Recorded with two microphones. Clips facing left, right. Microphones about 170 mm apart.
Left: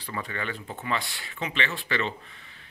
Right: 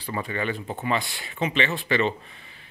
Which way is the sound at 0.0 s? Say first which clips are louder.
Right 5 dB; 15° right (ahead or behind).